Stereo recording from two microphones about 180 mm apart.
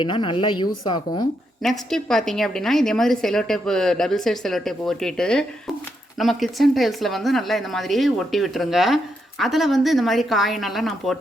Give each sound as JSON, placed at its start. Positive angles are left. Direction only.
{"t": 0.0, "sound": "a woman's voice", "side_deg": 30}
{"t": 1.6, "sound": "a woman's voice", "side_deg": 0}